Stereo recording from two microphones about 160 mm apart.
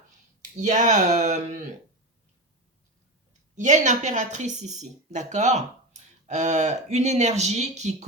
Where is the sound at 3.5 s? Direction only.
50° right (ahead or behind).